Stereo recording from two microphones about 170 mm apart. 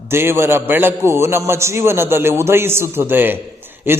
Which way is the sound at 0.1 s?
15° right (ahead or behind).